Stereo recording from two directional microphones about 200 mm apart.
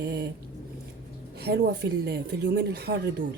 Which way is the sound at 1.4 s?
55° right (ahead or behind).